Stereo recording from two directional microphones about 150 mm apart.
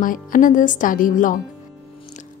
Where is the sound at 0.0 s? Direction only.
65° left (ahead or behind).